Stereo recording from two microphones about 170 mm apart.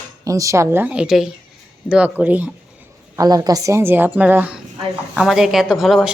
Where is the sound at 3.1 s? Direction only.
20° right (ahead or behind).